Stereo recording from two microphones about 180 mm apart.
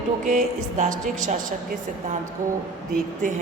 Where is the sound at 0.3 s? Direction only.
45° right (ahead or behind).